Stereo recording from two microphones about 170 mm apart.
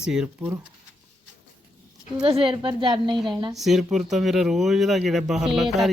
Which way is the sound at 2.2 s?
30° right (ahead or behind).